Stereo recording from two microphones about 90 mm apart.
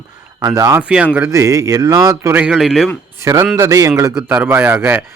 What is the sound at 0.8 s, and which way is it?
Speech, 15° right (ahead or behind).